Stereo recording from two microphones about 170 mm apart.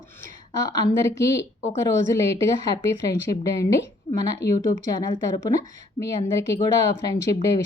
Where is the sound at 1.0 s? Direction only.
15° left (ahead or behind).